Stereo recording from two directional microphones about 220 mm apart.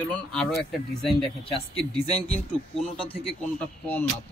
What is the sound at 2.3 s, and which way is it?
Speech, centre (ahead or behind).